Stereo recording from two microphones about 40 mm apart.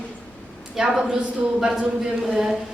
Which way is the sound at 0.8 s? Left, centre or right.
Centre.